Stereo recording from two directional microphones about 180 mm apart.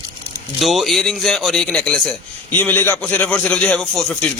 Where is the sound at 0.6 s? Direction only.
Centre (ahead or behind).